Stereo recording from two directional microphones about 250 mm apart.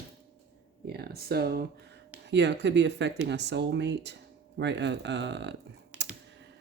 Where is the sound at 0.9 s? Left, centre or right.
Right.